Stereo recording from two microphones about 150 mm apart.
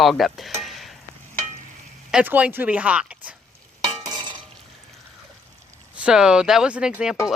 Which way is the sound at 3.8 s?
30° right (ahead or behind).